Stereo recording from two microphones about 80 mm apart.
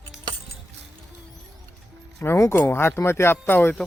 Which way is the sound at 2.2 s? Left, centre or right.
Left.